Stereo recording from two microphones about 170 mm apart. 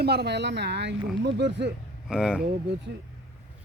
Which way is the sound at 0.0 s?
70° right (ahead or behind).